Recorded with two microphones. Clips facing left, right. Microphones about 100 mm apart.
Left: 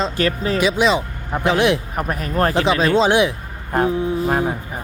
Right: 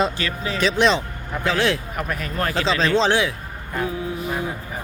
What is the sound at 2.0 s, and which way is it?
Speech, 40° left (ahead or behind).